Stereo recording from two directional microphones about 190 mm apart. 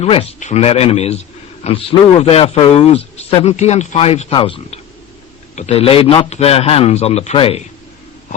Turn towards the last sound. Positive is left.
turn(degrees=30)  # may be behind; listen again after turning